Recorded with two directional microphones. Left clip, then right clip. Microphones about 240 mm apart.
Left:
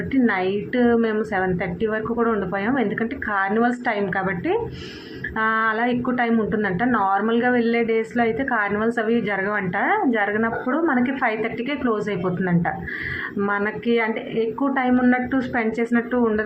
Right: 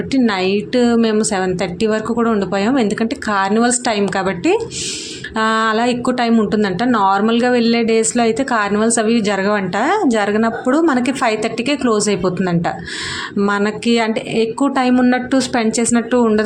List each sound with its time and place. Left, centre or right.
0.1 s a woman's voice: right